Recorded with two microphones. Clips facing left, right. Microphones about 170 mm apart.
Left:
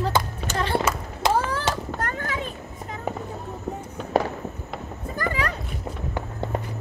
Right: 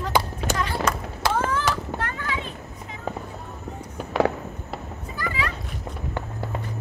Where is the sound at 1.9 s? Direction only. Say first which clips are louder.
Left 1 dB; 45° left (ahead or behind).